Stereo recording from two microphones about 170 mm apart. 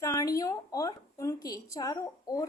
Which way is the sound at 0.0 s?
20° left (ahead or behind).